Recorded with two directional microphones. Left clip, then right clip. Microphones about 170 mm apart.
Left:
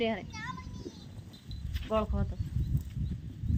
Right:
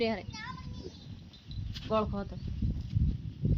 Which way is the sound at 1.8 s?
5° right (ahead or behind).